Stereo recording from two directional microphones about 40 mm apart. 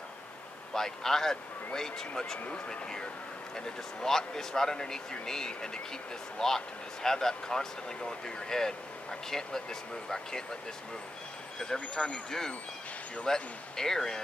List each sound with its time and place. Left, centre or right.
0.7 s speech: centre
11.6 s speech: left